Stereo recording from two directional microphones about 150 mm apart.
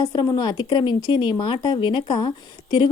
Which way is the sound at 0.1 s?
30° left (ahead or behind).